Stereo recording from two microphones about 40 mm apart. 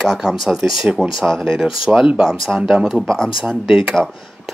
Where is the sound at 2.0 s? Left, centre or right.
Centre.